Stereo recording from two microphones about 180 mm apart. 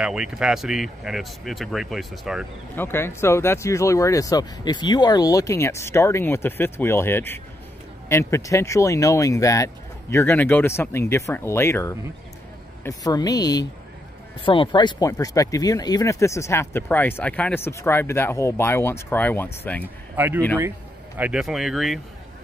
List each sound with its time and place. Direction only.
0.0 s speech: 5° right (ahead or behind)
2.7 s speech: 10° left (ahead or behind)
20.2 s speech: 15° right (ahead or behind)